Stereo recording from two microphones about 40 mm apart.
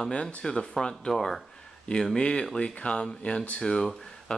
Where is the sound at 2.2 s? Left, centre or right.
Left.